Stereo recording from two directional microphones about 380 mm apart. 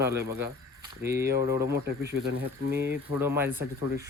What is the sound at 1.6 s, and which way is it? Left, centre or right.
Speech, right.